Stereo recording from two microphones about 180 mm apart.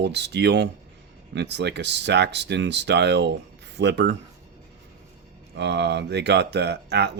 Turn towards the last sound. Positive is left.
turn(degrees=-70)  # may be behind; listen again after turning